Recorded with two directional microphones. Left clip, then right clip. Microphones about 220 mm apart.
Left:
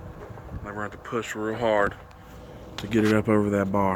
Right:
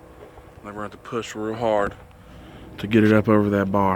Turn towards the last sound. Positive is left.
turn(degrees=-30)  # may be behind; listen again after turning